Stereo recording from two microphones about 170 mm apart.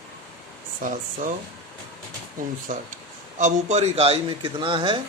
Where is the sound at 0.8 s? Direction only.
50° right (ahead or behind).